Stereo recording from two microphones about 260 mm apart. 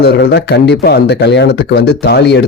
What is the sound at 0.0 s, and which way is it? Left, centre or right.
Speech, left.